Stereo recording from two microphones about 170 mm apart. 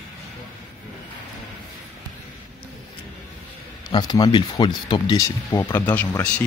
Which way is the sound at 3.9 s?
25° left (ahead or behind).